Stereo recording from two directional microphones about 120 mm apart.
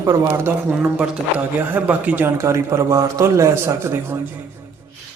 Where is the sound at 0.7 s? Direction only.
10° right (ahead or behind).